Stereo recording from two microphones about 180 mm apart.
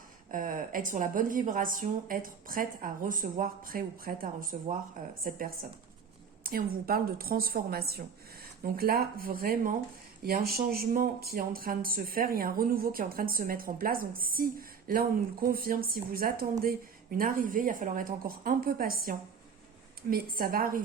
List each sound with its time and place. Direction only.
0.3 s a woman's voice: 50° right (ahead or behind)
6.4 s a woman's voice: 55° right (ahead or behind)